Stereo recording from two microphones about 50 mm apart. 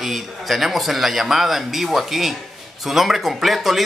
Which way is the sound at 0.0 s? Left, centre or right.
Centre.